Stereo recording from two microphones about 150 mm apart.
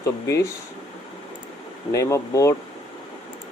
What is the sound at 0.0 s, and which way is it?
Speech, 20° left (ahead or behind).